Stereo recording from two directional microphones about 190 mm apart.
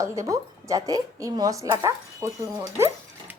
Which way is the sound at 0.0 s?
15° right (ahead or behind).